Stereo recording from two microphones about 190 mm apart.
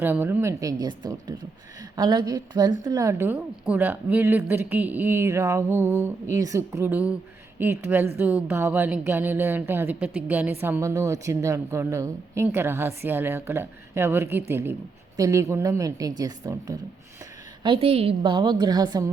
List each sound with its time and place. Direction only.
0.0 s a woman's voice: 10° right (ahead or behind)